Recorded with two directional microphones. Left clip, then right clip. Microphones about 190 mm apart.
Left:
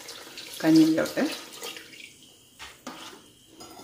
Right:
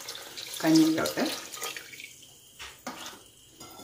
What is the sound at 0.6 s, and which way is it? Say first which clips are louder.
Speech: left 2 dB; 25° left (ahead or behind).